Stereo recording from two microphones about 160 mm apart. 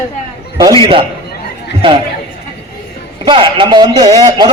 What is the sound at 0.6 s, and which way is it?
Speech, 25° right (ahead or behind).